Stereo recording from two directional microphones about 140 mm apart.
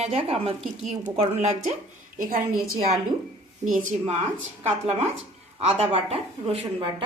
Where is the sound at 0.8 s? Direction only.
55° right (ahead or behind).